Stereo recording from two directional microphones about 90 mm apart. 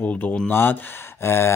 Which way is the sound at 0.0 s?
15° left (ahead or behind).